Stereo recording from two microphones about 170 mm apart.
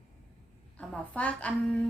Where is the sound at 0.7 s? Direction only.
10° left (ahead or behind).